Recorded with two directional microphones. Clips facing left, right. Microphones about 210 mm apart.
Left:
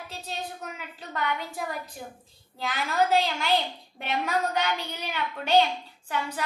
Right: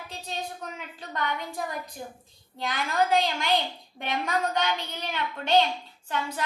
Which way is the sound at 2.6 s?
5° left (ahead or behind).